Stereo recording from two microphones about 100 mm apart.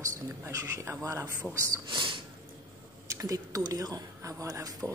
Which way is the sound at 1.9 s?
55° right (ahead or behind).